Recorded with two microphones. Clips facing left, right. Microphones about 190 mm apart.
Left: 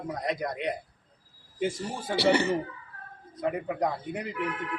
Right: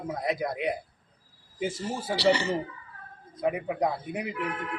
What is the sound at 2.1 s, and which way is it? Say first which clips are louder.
Speech: left 1 dB; 55° left (ahead or behind).